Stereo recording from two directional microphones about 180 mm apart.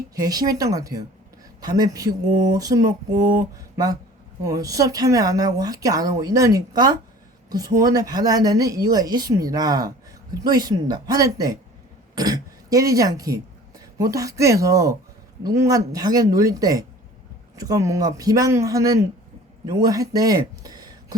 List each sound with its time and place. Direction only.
0.2 s a woman's voice: 20° right (ahead or behind)
4.4 s a woman's voice: 20° right (ahead or behind)